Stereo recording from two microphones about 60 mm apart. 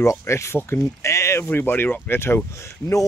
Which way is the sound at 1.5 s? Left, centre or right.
Left.